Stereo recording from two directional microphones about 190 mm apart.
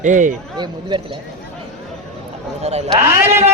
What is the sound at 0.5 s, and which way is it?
Speech, 25° right (ahead or behind).